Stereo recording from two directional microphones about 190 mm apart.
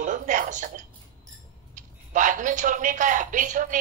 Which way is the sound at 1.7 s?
40° right (ahead or behind).